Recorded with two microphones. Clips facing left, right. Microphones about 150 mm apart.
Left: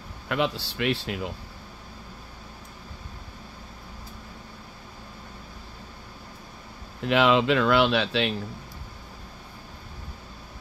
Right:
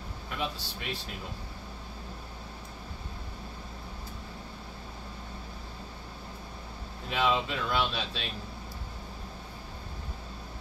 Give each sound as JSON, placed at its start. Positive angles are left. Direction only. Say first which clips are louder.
{"t": 0.3, "sound": "speech", "louder": "left 9 dB", "side_deg": 90}
{"t": 7.1, "sound": "speech", "louder": "left 8 dB", "side_deg": 85}